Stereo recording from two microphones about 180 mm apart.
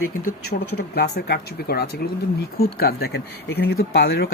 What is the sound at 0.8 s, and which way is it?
Speech, 65° left (ahead or behind).